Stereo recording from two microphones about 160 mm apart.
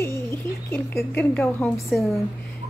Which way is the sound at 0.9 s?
5° left (ahead or behind).